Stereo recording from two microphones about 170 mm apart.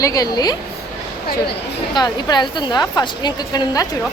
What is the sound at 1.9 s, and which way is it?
A woman's voice, 25° left (ahead or behind).